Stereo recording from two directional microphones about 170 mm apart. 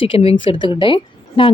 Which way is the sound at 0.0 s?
35° left (ahead or behind).